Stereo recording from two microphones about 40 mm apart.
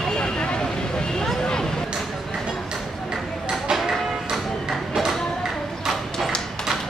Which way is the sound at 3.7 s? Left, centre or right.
Centre.